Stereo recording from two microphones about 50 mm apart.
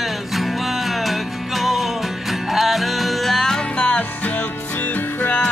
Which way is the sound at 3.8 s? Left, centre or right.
Left.